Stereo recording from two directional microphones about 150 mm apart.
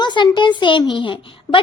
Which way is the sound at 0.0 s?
30° left (ahead or behind).